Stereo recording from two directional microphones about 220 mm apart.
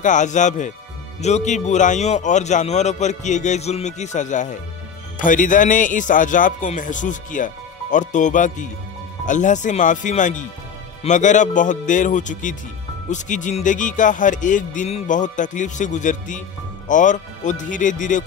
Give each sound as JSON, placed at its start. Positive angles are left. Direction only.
{"t": 0.0, "sound": "music", "side_deg": 35}